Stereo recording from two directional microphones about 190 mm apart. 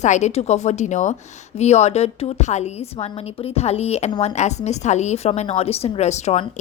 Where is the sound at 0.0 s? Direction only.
35° left (ahead or behind).